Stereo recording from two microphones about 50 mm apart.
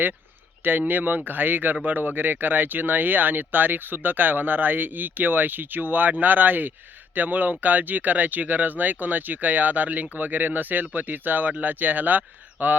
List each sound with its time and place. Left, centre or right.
0.6 s speech: right